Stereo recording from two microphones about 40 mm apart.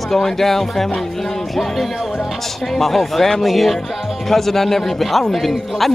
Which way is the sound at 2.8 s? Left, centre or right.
Centre.